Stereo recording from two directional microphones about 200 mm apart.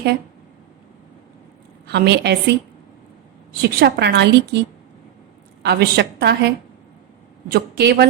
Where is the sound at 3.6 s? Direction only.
55° right (ahead or behind).